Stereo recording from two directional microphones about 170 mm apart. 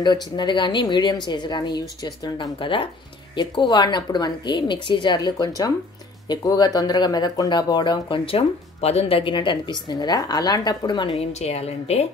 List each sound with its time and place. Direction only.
0.0 s speech: 25° left (ahead or behind)